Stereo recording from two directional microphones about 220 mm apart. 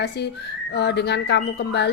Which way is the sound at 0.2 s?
50° left (ahead or behind).